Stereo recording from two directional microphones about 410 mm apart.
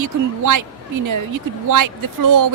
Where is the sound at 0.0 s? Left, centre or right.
Right.